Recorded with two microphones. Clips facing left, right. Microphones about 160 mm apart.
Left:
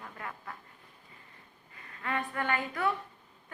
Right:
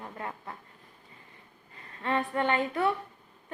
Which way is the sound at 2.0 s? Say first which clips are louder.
Right 5 dB; 30° right (ahead or behind).